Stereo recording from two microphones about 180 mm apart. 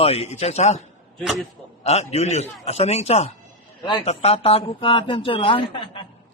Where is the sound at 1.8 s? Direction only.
35° left (ahead or behind).